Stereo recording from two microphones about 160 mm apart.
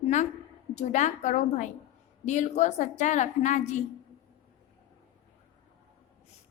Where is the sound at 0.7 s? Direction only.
45° left (ahead or behind).